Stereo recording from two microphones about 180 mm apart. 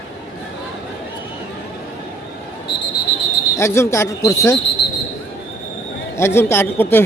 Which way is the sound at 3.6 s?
15° left (ahead or behind).